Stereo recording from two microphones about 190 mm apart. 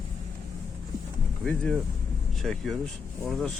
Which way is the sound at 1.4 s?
Centre (ahead or behind).